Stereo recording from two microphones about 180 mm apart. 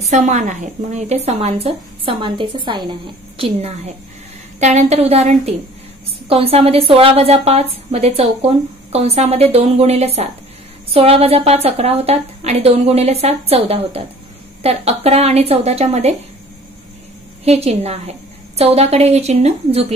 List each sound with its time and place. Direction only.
0.1 s a woman's voice: 40° right (ahead or behind)
17.5 s a woman's voice: 35° right (ahead or behind)